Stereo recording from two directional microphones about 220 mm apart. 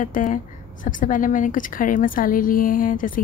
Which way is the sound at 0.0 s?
35° left (ahead or behind).